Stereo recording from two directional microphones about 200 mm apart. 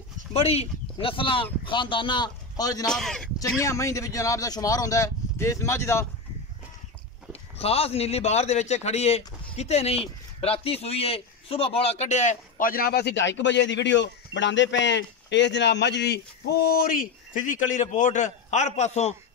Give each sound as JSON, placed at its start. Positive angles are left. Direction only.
{"t": 0.3, "sound": "speech", "side_deg": 30}
{"t": 2.9, "sound": "speech", "side_deg": 5}
{"t": 3.3, "sound": "a man's voice", "side_deg": 15}
{"t": 7.5, "sound": "a man's voice", "side_deg": 30}